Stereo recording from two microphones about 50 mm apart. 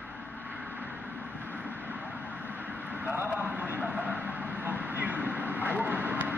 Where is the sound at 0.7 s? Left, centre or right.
Right.